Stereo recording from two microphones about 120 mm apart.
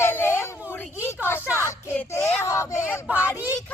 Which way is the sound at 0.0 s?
20° left (ahead or behind).